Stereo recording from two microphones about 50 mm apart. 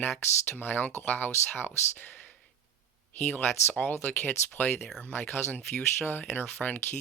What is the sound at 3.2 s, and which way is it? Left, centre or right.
Speech, left.